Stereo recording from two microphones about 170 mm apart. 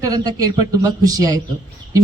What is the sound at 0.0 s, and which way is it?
A man's voice, 20° right (ahead or behind).